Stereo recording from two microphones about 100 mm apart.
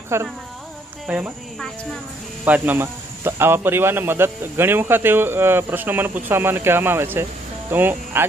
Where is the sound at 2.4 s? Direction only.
15° right (ahead or behind).